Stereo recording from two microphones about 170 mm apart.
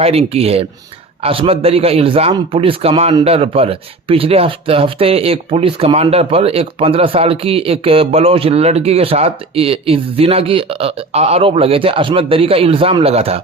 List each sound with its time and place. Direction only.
0.0 s speech: 35° right (ahead or behind)